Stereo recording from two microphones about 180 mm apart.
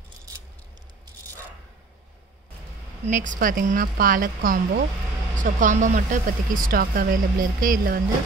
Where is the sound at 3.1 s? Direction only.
45° right (ahead or behind).